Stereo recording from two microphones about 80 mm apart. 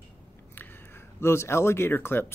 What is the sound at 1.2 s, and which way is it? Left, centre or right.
Speech, left.